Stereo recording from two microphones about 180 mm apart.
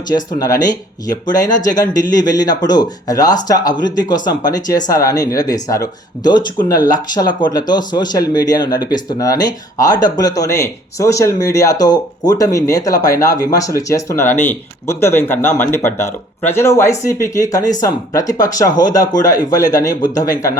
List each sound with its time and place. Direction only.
0.1 s speech: 20° left (ahead or behind)